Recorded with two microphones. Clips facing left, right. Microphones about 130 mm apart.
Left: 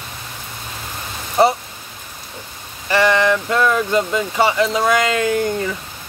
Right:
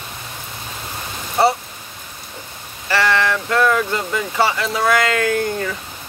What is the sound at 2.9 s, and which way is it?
Speech, 20° left (ahead or behind).